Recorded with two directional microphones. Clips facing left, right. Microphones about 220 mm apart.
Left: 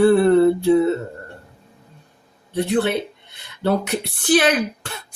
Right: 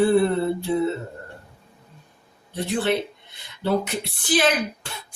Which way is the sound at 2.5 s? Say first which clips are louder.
Left 6 dB; 60° left (ahead or behind).